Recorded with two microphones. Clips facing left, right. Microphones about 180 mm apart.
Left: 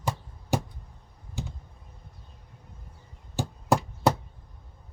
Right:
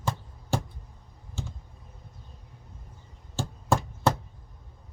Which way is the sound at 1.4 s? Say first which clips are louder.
Left 1 dB; 15° left (ahead or behind).